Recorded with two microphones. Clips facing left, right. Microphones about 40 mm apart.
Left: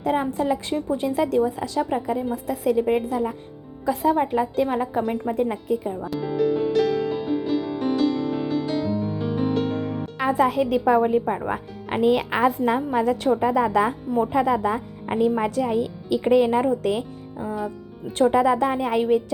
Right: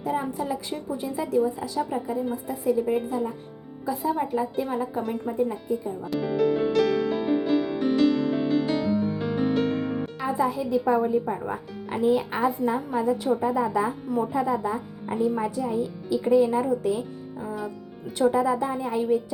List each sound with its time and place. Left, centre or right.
0.0 s a woman's voice: left
2.3 s a woman's voice: left
3.1 s a woman's voice: left
3.8 s a woman's voice: left
4.1 s a woman's voice: left
5.0 s speech: left
5.3 s a woman's voice: left
6.1 s music: centre
10.2 s a woman's voice: left
11.3 s a woman's voice: left
13.4 s a woman's voice: left
17.4 s speech: centre
18.2 s a woman's voice: left